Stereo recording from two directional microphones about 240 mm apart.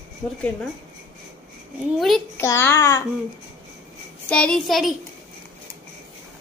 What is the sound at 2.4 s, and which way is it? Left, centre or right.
Speech, centre.